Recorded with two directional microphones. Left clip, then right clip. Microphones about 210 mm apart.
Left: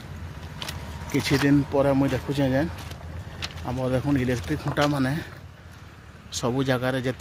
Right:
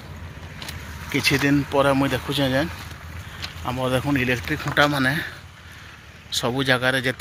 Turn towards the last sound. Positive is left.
turn(degrees=5)  # may be behind; listen again after turning